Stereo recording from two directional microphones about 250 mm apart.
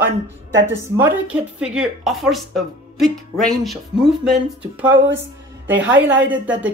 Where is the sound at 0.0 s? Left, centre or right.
Right.